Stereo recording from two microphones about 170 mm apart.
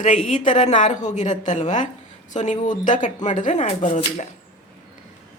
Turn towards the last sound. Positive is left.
turn(degrees=45)  # may be behind; listen again after turning